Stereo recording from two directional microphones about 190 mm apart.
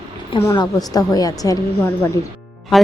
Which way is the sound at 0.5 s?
20° left (ahead or behind).